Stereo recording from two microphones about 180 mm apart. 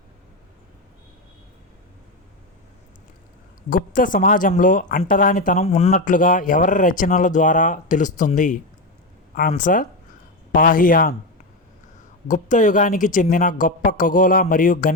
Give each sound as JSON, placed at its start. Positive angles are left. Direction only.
{"t": 3.7, "sound": "speech", "side_deg": 50}
{"t": 5.9, "sound": "speech", "side_deg": 45}
{"t": 12.3, "sound": "speech", "side_deg": 45}